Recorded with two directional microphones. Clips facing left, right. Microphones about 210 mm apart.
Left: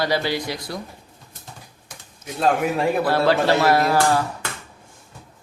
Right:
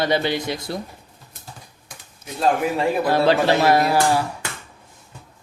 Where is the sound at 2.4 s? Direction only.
Centre (ahead or behind).